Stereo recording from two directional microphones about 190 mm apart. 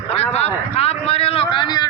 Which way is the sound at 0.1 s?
35° left (ahead or behind).